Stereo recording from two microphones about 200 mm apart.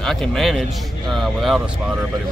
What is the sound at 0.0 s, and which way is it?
Speech, centre (ahead or behind).